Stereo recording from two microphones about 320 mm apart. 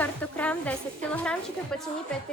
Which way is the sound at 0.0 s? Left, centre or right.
Centre.